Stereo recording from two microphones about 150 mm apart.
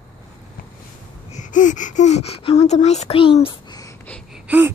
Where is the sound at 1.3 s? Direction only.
55° left (ahead or behind); by 3.9 s 30° left (ahead or behind).